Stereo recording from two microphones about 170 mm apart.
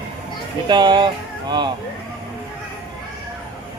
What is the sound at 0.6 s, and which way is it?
Speech, 25° right (ahead or behind).